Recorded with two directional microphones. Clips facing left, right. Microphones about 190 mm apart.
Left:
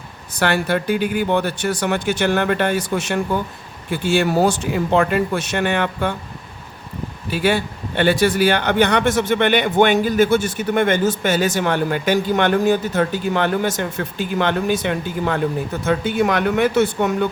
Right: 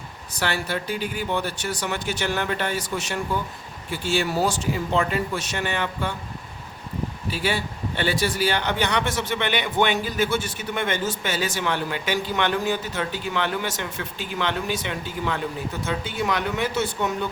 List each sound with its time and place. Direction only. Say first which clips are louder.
0.3 s speech: left 8 dB; 55° left (ahead or behind)
7.3 s a man's voice: left 8 dB; 55° left (ahead or behind)